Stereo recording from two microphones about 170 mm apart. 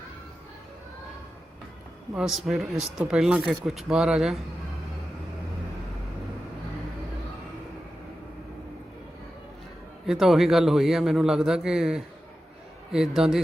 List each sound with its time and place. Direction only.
2.1 s speech: centre (ahead or behind)
10.1 s speech: centre (ahead or behind)